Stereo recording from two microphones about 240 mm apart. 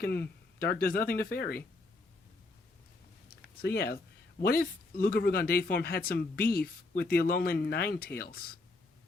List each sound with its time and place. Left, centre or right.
0.0 s speech: left
3.2 s a sound: left
4.4 s speech: left